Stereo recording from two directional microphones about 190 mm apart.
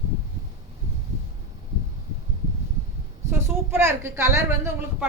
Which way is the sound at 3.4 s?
15° right (ahead or behind).